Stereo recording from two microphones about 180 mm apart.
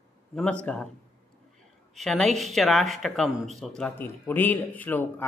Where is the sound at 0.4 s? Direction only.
5° left (ahead or behind).